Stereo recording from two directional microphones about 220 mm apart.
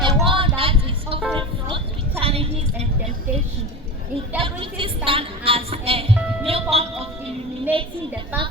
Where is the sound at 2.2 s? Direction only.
25° right (ahead or behind).